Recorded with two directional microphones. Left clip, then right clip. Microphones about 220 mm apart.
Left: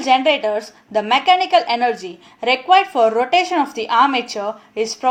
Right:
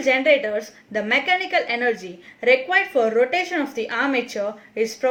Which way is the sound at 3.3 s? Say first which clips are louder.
Left 7 dB; 15° left (ahead or behind).